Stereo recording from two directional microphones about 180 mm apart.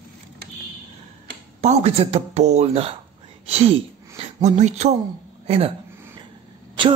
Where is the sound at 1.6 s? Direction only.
35° right (ahead or behind).